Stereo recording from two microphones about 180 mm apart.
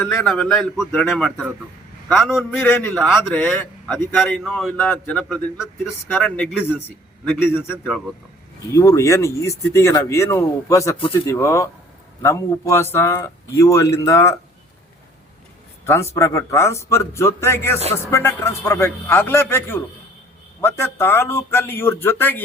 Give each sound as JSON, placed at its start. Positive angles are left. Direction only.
{"t": 0.3, "sound": "a man's voice", "side_deg": 0}
{"t": 2.6, "sound": "a man's voice", "side_deg": 10}
{"t": 15.9, "sound": "speech", "side_deg": 15}